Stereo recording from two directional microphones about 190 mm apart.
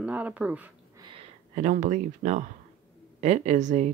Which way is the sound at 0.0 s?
5° right (ahead or behind).